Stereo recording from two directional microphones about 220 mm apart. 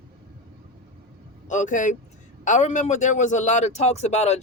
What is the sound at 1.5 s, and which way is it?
A man's voice, 35° left (ahead or behind).